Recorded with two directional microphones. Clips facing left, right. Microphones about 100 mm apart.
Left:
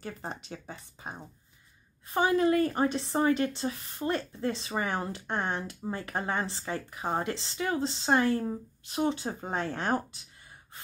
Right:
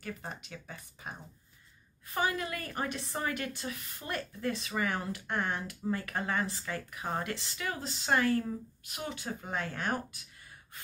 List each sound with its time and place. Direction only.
0.0 s speech: 30° left (ahead or behind)